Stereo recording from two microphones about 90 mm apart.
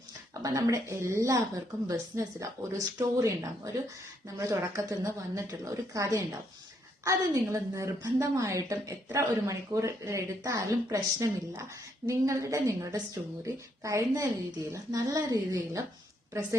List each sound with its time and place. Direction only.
0.4 s speech: 40° right (ahead or behind)